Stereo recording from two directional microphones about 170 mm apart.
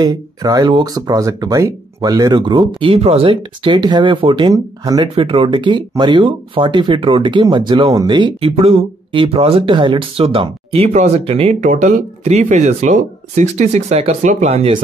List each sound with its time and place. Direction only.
0.0 s speech: 25° right (ahead or behind)